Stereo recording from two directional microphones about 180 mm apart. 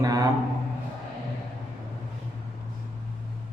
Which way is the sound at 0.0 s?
20° right (ahead or behind).